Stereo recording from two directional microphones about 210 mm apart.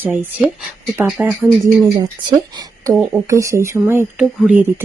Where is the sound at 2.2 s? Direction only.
20° right (ahead or behind).